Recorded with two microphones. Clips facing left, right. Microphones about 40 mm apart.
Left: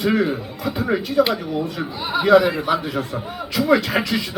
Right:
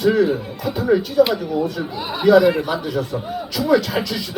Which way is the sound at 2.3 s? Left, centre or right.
Left.